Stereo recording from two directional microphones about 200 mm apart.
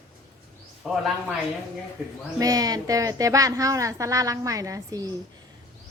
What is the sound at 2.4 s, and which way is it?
A woman's voice, 20° right (ahead or behind).